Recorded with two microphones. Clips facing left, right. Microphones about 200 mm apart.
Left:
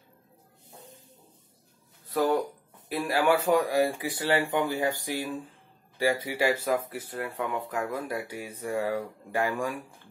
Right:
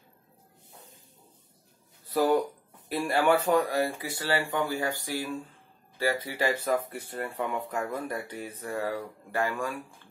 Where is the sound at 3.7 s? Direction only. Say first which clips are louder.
Left 3 dB; 15° left (ahead or behind).